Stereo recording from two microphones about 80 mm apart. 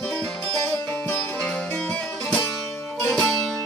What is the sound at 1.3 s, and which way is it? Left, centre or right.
Music, centre.